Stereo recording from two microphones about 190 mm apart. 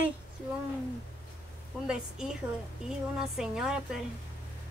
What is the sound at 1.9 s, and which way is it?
Speech, 5° right (ahead or behind).